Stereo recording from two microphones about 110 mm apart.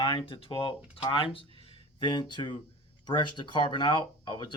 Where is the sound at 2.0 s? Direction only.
45° left (ahead or behind).